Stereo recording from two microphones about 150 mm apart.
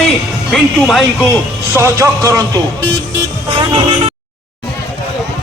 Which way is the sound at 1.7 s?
20° right (ahead or behind).